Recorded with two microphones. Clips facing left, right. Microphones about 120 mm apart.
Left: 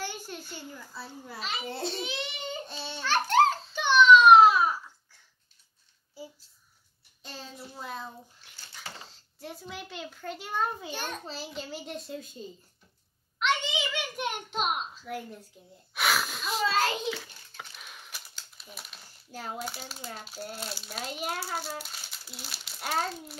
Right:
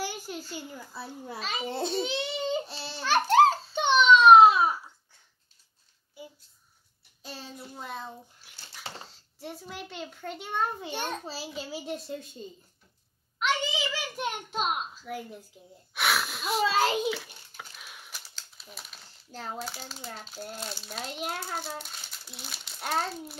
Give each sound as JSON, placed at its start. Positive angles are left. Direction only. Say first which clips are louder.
{"t": 0.0, "sound": "a child's voice", "louder": "right 3 dB", "side_deg": -10}
{"t": 2.6, "sound": "babbling", "louder": "left 1 dB", "side_deg": 0}
{"t": 3.4, "sound": "a sound", "louder": "right 3 dB", "side_deg": -25}
{"t": 7.2, "sound": "child singing", "louder": "right 1 dB", "side_deg": 0}
{"t": 7.7, "sound": "speech", "louder": "even", "side_deg": 0}
{"t": 8.4, "sound": "dog", "louder": "even", "side_deg": -5}
{"t": 9.0, "sound": "a child's voice", "louder": "right 2 dB", "side_deg": 0}
{"t": 13.4, "sound": "a sound", "louder": "even", "side_deg": 0}
{"t": 15.9, "sound": "wheeze", "louder": "even", "side_deg": 0}
{"t": 16.6, "sound": "a child's voice", "louder": "right 2 dB", "side_deg": -10}